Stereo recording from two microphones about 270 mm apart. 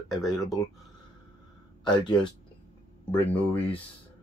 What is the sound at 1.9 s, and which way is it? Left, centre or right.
Speech, centre.